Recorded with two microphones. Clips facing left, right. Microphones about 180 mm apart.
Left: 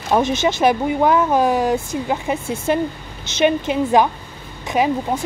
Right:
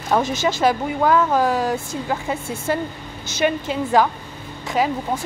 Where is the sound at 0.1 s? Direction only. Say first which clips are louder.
Left 3 dB; 20° left (ahead or behind).